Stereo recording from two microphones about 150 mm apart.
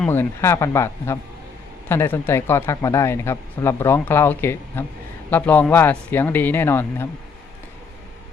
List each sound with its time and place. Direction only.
0.0 s speech: 15° left (ahead or behind)